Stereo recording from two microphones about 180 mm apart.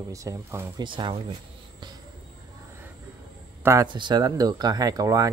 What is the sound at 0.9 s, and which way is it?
Speech, 25° right (ahead or behind).